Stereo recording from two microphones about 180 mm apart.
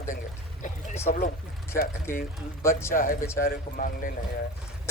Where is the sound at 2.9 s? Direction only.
50° left (ahead or behind).